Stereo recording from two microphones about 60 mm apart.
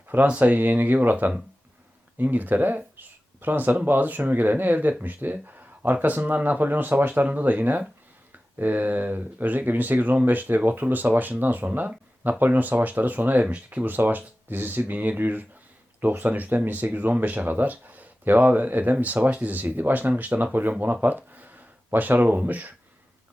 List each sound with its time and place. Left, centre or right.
0.3 s speech: right